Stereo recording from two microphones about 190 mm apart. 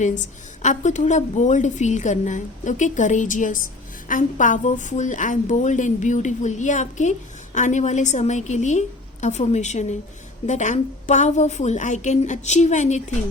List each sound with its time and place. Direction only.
0.6 s a woman's voice: 40° left (ahead or behind)